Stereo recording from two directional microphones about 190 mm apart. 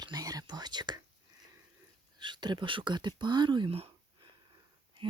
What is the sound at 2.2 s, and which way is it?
Speech, 25° right (ahead or behind).